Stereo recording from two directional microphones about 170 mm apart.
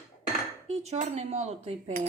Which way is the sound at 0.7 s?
40° right (ahead or behind).